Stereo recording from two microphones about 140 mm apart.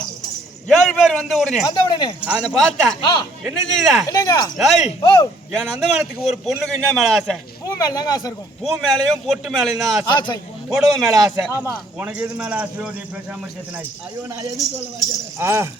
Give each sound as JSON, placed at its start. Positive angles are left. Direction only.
{"t": 0.7, "sound": "a man's voice", "side_deg": 0}
{"t": 1.6, "sound": "speech", "side_deg": 35}
{"t": 2.2, "sound": "a man's voice", "side_deg": -10}
{"t": 3.0, "sound": "speech", "side_deg": 35}
{"t": 3.4, "sound": "a man's voice", "side_deg": 0}
{"t": 4.1, "sound": "speech", "side_deg": 25}
{"t": 4.5, "sound": "a man's voice", "side_deg": 0}
{"t": 7.7, "sound": "speech", "side_deg": 30}
{"t": 8.6, "sound": "a man's voice", "side_deg": 0}
{"t": 10.1, "sound": "speech", "side_deg": 30}
{"t": 10.7, "sound": "a man's voice", "side_deg": 0}
{"t": 11.5, "sound": "a man's voice", "side_deg": -15}
{"t": 15.4, "sound": "speech", "side_deg": -20}